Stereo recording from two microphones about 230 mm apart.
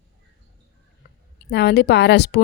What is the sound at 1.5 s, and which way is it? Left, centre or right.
Speech, left.